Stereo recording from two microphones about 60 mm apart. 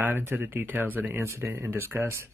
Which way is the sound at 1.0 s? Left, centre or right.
Right.